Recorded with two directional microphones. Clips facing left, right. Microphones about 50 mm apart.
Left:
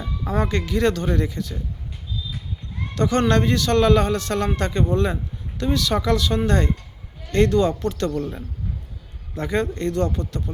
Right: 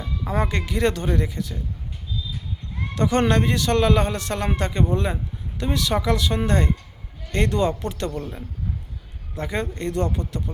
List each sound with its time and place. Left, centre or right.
0.3 s a man's voice: centre
2.9 s a man's voice: centre
9.3 s a man's voice: centre